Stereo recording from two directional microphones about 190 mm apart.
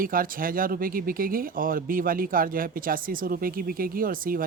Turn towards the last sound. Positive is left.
turn(degrees=-50)  # may be behind; listen again after turning